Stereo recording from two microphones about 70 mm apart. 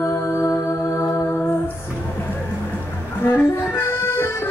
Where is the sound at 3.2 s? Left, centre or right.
Left.